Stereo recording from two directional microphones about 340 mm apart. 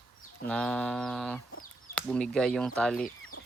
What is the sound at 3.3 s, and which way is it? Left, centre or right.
Chicken, left.